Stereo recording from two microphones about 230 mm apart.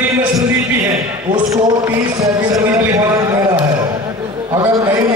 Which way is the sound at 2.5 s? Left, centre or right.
Centre.